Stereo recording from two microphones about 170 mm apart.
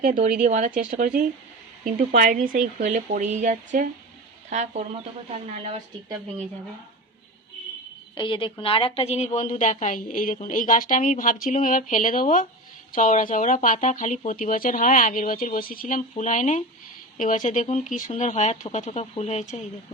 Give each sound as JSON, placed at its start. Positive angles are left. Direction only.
{"t": 0.4, "sound": "speech", "side_deg": -50}
{"t": 8.1, "sound": "a woman's voice", "side_deg": 30}